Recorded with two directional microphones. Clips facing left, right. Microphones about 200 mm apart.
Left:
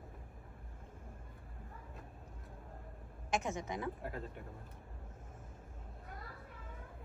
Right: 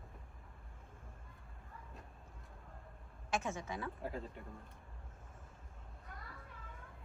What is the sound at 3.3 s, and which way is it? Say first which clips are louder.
Speech: left 2 dB; 15° left (ahead or behind).